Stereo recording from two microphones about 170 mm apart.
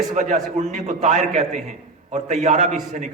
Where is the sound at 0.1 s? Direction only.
45° right (ahead or behind).